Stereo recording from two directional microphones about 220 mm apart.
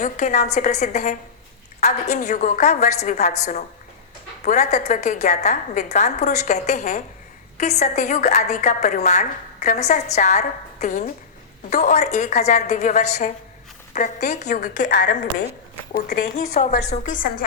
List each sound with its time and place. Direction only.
0.0 s a woman's voice: 35° left (ahead or behind)
4.4 s a woman's voice: 30° left (ahead or behind)